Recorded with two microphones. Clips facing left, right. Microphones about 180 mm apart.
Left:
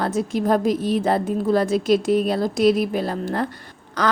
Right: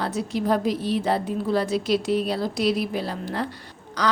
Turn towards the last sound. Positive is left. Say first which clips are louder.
# left 3 dB
turn(degrees=50)  # may be behind; listen again after turning